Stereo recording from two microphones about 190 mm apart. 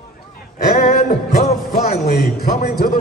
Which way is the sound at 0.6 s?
45° left (ahead or behind).